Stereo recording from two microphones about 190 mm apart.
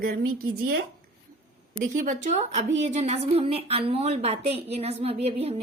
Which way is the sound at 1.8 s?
45° right (ahead or behind).